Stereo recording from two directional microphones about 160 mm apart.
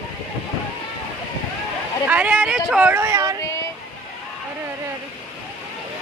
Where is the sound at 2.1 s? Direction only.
10° right (ahead or behind).